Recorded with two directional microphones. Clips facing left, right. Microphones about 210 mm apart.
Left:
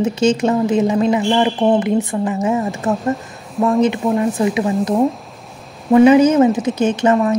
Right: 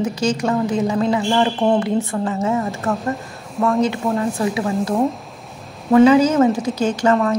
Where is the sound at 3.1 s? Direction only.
Centre (ahead or behind).